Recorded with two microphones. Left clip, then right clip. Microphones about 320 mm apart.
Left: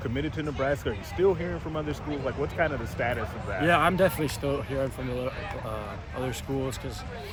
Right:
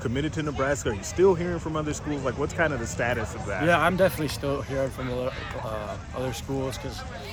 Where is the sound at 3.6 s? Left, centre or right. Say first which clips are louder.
Right 1 dB; centre.